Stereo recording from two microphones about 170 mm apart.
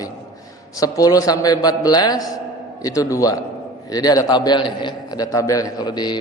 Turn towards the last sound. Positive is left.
turn(degrees=25)  # may be behind; listen again after turning